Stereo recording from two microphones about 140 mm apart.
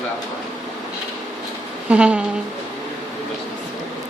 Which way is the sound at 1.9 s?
10° right (ahead or behind).